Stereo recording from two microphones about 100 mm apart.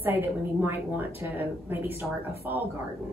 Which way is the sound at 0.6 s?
20° right (ahead or behind).